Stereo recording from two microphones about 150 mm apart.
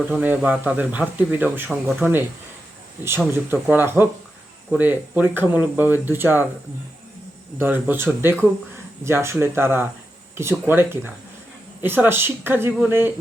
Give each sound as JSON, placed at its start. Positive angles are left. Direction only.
{"t": 0.2, "sound": "speech", "side_deg": -10}
{"t": 3.3, "sound": "speech", "side_deg": -15}
{"t": 7.6, "sound": "speech", "side_deg": -15}